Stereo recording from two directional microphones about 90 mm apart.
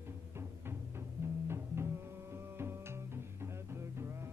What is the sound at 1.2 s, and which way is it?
Music, 30° right (ahead or behind).